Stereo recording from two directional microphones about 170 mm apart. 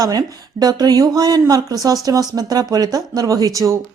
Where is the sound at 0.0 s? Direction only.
20° right (ahead or behind).